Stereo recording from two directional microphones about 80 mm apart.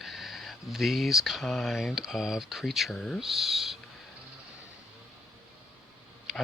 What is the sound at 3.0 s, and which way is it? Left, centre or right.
Speech, centre.